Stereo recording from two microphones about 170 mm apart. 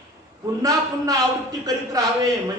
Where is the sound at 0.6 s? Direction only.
20° right (ahead or behind).